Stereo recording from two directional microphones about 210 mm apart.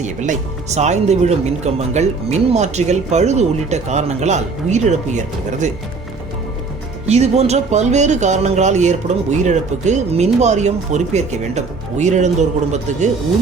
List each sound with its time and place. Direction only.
0.0 s speech: 35° right (ahead or behind)
7.1 s speech: 30° right (ahead or behind)